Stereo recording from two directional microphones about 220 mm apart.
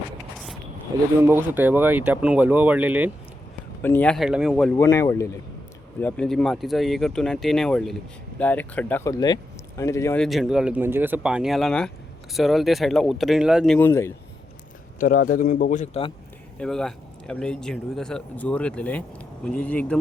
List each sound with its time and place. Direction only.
1.2 s speech: 10° right (ahead or behind)
3.8 s speech: 5° left (ahead or behind)
4.8 s speech: 15° left (ahead or behind)
10.2 s speech: centre (ahead or behind)
13.7 s speech: 10° left (ahead or behind)
14.9 s a man's voice: 40° left (ahead or behind)
16.6 s speech: centre (ahead or behind)